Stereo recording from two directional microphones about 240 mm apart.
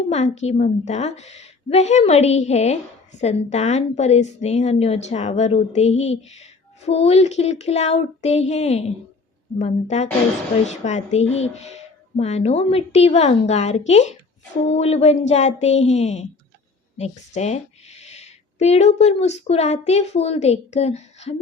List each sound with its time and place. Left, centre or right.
0.1 s a woman's voice: left